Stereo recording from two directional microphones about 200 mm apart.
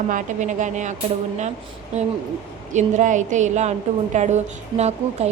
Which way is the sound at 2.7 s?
35° right (ahead or behind).